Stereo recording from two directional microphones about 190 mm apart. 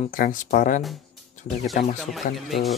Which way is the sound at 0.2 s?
45° left (ahead or behind).